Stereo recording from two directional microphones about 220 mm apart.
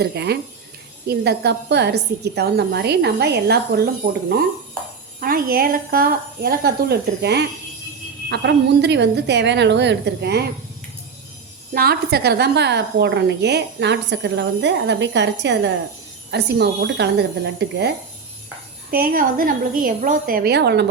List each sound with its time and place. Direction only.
0.0 s a woman's voice: 50° right (ahead or behind)
11.7 s a woman's voice: 45° right (ahead or behind)